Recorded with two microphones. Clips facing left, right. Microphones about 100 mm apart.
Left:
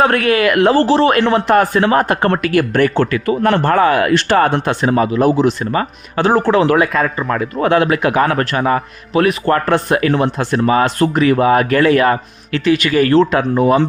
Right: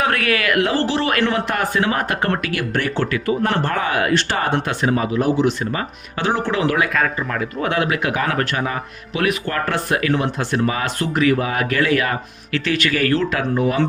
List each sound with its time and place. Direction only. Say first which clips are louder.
0.0 s speech: left 7 dB; 30° left (ahead or behind); by 4.4 s 60° left (ahead or behind)
4.5 s speech: left 4 dB; 30° left (ahead or behind)
4.9 s speech: left 7 dB; 50° left (ahead or behind)
12.6 s speech: left 7 dB; 15° left (ahead or behind); by 13.8 s 30° left (ahead or behind)